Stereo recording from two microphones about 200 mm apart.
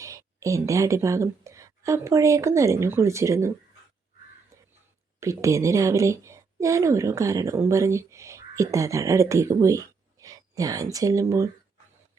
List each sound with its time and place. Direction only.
0.0 s a woman's voice: 15° right (ahead or behind)
5.2 s a woman's voice: 15° right (ahead or behind)